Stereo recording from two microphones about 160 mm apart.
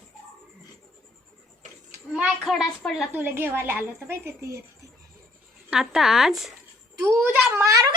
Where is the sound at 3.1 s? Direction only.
15° right (ahead or behind).